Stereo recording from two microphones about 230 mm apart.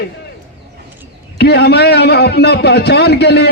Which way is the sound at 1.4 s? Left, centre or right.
Left.